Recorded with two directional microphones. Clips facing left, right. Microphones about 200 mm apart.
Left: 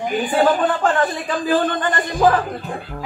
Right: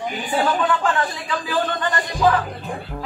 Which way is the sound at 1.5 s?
50° left (ahead or behind).